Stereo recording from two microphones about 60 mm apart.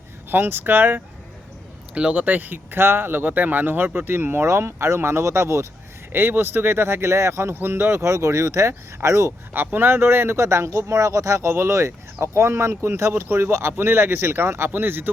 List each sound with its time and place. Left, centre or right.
0.3 s speech: right
1.9 s speech: centre; by 4.4 s right
4.4 s speech: right
6.1 s speech: right
9.7 s speech: right